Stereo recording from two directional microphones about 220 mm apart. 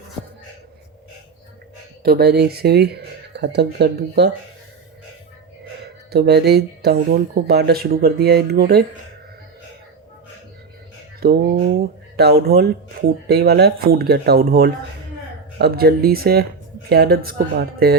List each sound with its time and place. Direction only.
2.0 s speech: 45° right (ahead or behind)
6.1 s speech: 45° right (ahead or behind)
11.2 s speech: 45° right (ahead or behind)